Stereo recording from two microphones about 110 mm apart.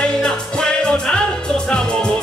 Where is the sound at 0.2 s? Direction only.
5° left (ahead or behind).